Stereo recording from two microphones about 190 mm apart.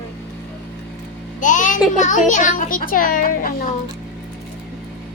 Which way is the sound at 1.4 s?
40° left (ahead or behind).